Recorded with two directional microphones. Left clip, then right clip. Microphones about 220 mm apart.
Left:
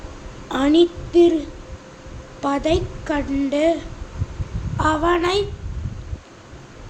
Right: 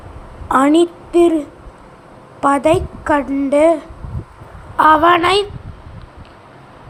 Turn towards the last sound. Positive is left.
turn(degrees=-20)  # may be behind; listen again after turning